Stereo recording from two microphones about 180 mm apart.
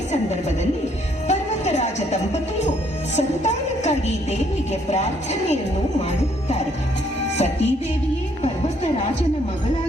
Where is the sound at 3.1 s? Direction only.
40° left (ahead or behind).